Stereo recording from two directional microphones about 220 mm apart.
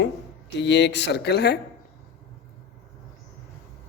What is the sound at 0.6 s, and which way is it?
Speech, 55° left (ahead or behind).